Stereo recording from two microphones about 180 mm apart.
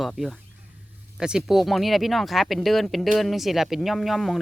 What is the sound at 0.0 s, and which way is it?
Speech, centre (ahead or behind).